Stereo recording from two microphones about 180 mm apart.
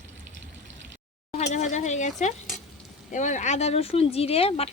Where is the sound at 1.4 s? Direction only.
40° left (ahead or behind).